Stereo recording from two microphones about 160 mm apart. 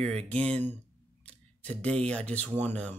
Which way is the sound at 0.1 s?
40° right (ahead or behind).